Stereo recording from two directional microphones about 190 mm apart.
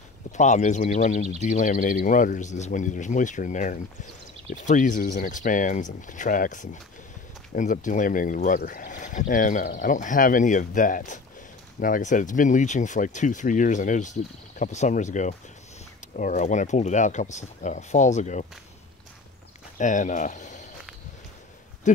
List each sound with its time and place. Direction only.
0.4 s speech: 40° left (ahead or behind)
19.8 s speech: 40° left (ahead or behind)
21.9 s speech: 40° left (ahead or behind)